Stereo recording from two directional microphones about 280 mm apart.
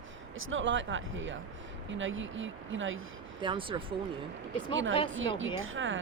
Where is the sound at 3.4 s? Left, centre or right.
Centre.